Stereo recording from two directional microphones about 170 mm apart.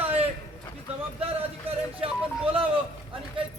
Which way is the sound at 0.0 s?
35° right (ahead or behind).